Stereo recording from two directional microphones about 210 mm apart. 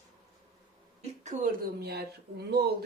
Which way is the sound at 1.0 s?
35° right (ahead or behind).